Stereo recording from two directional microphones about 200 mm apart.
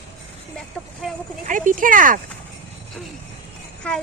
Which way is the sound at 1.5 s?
40° right (ahead or behind).